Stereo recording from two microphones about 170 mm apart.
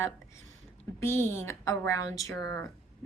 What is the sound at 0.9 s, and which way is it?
A woman's voice, 15° left (ahead or behind).